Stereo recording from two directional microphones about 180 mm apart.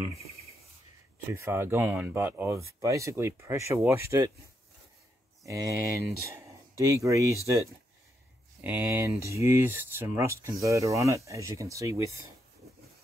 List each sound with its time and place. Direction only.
1.3 s speech: 15° right (ahead or behind)
5.4 s speech: 20° right (ahead or behind)
8.5 s speech: 10° right (ahead or behind)